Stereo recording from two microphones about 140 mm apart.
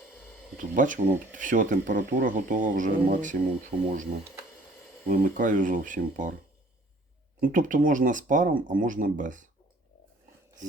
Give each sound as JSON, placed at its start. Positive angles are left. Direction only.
{"t": 0.5, "sound": "speech", "side_deg": -70}
{"t": 5.0, "sound": "speech", "side_deg": -80}
{"t": 7.4, "sound": "speech", "side_deg": -70}